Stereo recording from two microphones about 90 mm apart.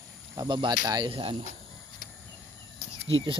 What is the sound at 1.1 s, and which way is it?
Speech, 90° right.